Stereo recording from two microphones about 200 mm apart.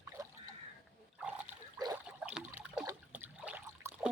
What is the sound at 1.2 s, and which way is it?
Trickle, 5° right (ahead or behind).